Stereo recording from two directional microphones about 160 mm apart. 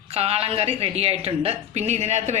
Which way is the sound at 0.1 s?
40° right (ahead or behind).